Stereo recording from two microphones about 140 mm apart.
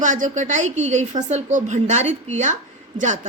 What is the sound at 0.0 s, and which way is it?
A woman's voice, 60° right (ahead or behind).